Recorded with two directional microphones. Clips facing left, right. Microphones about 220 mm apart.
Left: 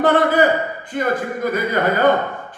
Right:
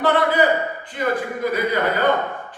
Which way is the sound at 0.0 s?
45° left (ahead or behind).